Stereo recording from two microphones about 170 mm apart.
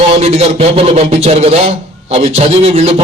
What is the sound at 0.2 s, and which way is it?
A man's voice, 40° right (ahead or behind).